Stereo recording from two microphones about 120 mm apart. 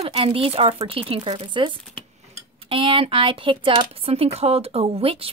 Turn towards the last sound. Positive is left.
turn(degrees=-50)  # may be behind; listen again after turning